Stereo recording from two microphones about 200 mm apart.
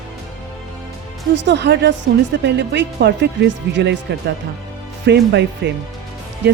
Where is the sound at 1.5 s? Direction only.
60° right (ahead or behind).